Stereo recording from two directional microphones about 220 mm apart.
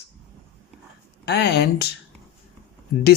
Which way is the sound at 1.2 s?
50° left (ahead or behind).